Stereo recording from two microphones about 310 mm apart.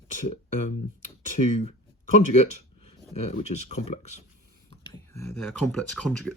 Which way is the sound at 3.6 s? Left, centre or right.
Centre.